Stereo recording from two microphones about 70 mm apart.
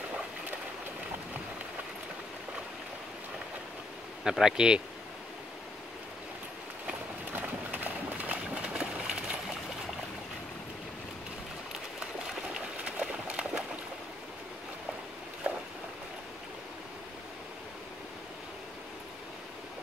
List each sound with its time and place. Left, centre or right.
4.2 s speech: centre
6.9 s run: right
12.3 s a sound: centre